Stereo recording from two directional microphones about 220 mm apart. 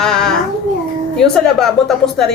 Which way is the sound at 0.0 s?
Centre (ahead or behind).